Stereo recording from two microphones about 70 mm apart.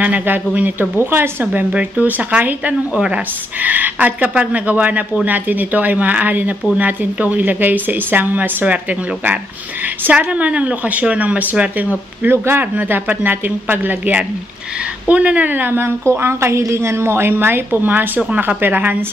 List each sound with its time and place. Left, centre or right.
0.0 s a woman's voice: right
10.1 s a woman's voice: centre
12.2 s a woman's voice: right